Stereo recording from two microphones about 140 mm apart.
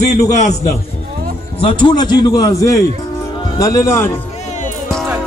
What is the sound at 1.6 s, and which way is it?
A man's voice, 35° left (ahead or behind).